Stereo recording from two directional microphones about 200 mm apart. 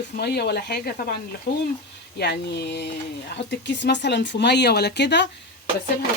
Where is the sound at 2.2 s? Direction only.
55° left (ahead or behind).